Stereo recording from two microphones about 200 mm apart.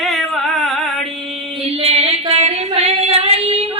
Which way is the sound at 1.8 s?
30° right (ahead or behind).